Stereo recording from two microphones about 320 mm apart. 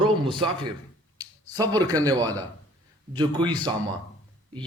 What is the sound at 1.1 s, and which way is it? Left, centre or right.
A man's voice, centre.